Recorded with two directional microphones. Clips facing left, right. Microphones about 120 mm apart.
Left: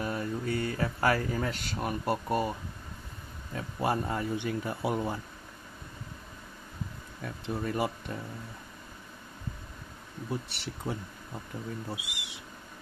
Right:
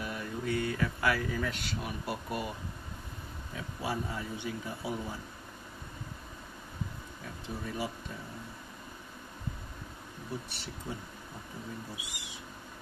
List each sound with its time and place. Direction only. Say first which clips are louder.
0.0 s speech: left 4 dB; 40° left (ahead or behind)
3.5 s speech: left 6 dB; 55° left (ahead or behind)
7.4 s speech: left 6 dB; 60° left (ahead or behind)
10.5 s speech: left 5 dB; 75° left (ahead or behind)